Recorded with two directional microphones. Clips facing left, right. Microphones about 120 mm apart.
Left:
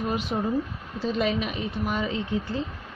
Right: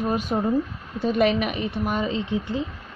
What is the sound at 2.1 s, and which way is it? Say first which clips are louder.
Speech: right 2 dB; 20° right (ahead or behind).